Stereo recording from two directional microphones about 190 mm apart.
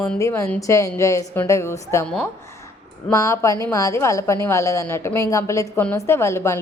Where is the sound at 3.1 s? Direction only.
15° left (ahead or behind).